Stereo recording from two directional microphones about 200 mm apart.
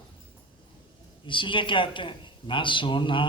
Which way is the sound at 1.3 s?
25° left (ahead or behind).